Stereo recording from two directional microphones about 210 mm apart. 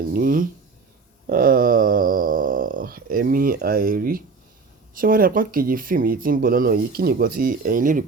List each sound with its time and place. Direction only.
0.1 s speech: 45° right (ahead or behind)
1.3 s a sound: 45° right (ahead or behind)
4.9 s speech: 40° right (ahead or behind)